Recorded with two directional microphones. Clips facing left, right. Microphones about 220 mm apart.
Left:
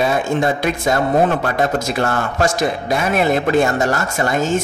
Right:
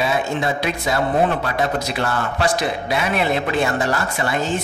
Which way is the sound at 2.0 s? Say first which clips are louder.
Left 3 dB; 45° left (ahead or behind).